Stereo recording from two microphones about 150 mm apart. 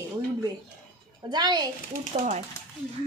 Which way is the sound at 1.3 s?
30° right (ahead or behind).